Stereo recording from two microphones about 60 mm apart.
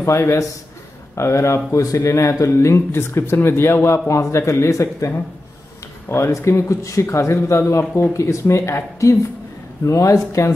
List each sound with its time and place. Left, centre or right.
1.1 s speech: left
4.1 s speech: left
6.0 s speech: left
8.1 s speech: left